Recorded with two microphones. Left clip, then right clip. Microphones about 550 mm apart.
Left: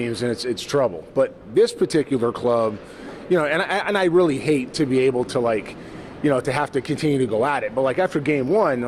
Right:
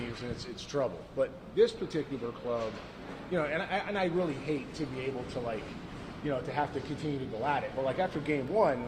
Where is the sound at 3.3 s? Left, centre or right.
Left.